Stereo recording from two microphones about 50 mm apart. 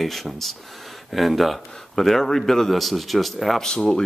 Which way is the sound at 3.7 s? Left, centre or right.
Centre.